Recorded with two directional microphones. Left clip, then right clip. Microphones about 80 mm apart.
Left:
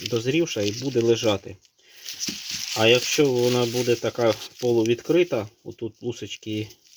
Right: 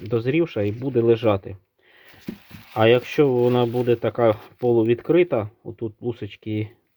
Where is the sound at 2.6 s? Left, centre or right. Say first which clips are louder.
Right 2 dB; centre.